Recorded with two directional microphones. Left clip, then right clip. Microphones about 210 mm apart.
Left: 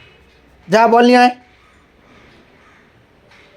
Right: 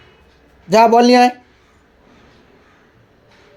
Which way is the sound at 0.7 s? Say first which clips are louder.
Even; centre (ahead or behind).